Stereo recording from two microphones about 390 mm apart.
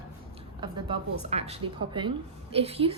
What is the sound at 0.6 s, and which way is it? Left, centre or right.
A woman's voice, centre.